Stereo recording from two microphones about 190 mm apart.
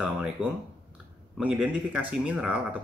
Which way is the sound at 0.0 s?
5° right (ahead or behind).